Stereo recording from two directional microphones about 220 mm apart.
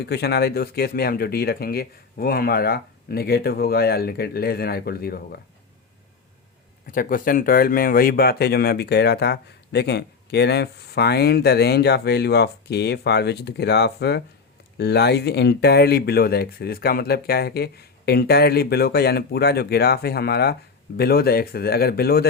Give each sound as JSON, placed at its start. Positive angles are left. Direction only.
{"t": 0.0, "sound": "speech", "side_deg": 50}
{"t": 6.9, "sound": "speech", "side_deg": 40}